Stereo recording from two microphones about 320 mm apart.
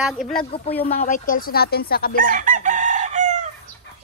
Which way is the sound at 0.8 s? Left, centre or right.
Left.